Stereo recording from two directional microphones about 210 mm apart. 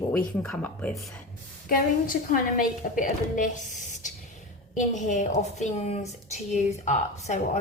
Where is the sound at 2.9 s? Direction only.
40° left (ahead or behind).